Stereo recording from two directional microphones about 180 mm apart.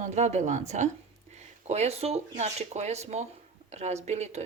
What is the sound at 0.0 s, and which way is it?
A woman's voice, 40° right (ahead or behind).